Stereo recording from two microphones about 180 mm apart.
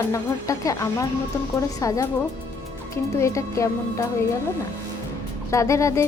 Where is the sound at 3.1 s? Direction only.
15° left (ahead or behind).